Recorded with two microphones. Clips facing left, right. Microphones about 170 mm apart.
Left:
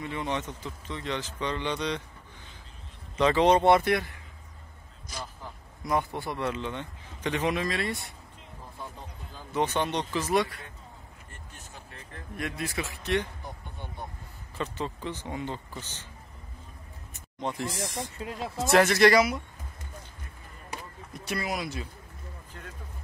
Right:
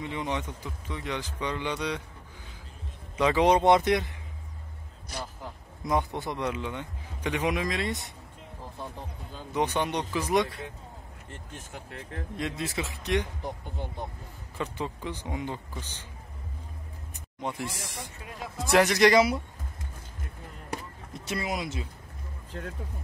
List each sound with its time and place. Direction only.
0.0 s speech: 15° right (ahead or behind)
3.2 s speech: 10° right (ahead or behind)
5.9 s speech: 20° right (ahead or behind)
9.5 s speech: 15° right (ahead or behind)
12.4 s speech: 20° right (ahead or behind)
14.6 s speech: 10° right (ahead or behind)
17.4 s speech: 10° right (ahead or behind)
18.2 s speech: 25° left (ahead or behind)
18.7 s speech: 15° right (ahead or behind)
21.1 s speech: 25° right (ahead or behind)